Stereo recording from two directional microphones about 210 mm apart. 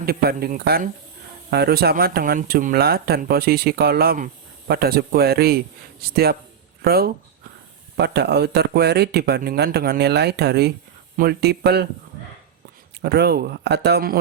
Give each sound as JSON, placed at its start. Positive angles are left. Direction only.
{"t": 0.0, "sound": "speech", "side_deg": -45}
{"t": 13.0, "sound": "speech", "side_deg": -50}